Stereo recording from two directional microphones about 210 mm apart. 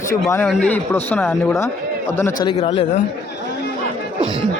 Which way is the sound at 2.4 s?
25° left (ahead or behind).